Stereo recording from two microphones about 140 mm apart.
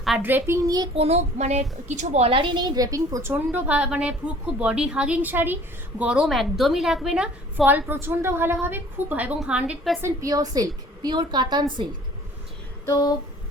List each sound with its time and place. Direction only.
0.2 s a woman's voice: 15° right (ahead or behind)
0.9 s child singing: 50° right (ahead or behind)
1.9 s a woman's voice: 55° right (ahead or behind); by 10.0 s 5° right (ahead or behind)
10.0 s a woman's voice: 25° right (ahead or behind)
12.8 s a sound: 25° left (ahead or behind)